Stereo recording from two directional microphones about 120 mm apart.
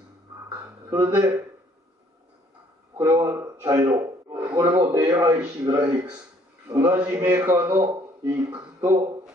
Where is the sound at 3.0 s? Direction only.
25° right (ahead or behind).